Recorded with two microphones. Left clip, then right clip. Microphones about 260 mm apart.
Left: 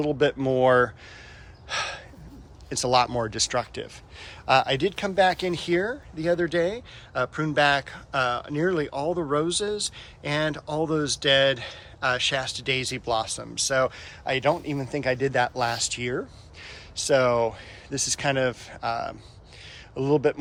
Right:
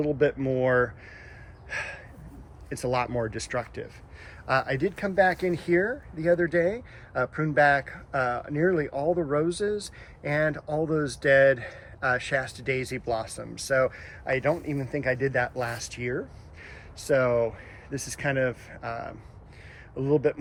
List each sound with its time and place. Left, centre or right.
0.0 s speech: centre